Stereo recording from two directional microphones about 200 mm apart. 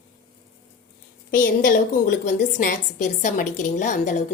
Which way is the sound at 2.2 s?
40° left (ahead or behind).